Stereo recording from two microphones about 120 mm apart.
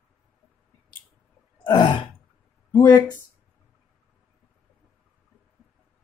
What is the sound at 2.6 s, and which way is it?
Speech, 20° left (ahead or behind).